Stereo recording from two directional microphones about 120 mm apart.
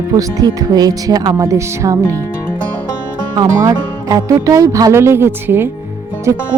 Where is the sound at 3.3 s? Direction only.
35° right (ahead or behind); by 5.7 s 20° right (ahead or behind).